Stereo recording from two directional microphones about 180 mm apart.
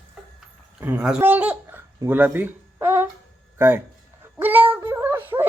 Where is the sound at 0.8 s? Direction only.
10° right (ahead or behind).